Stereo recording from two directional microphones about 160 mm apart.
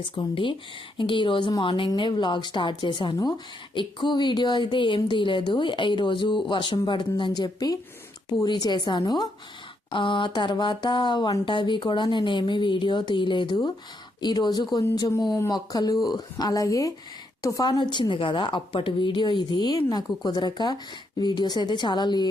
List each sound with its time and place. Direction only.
0.2 s a woman's voice: 30° left (ahead or behind)